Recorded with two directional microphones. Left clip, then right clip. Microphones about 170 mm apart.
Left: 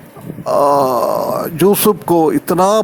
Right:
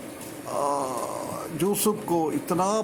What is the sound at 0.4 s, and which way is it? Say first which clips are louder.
Speech: left 15 dB; 55° left (ahead or behind).